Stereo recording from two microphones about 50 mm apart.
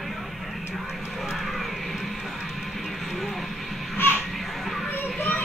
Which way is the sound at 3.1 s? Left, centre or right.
Centre.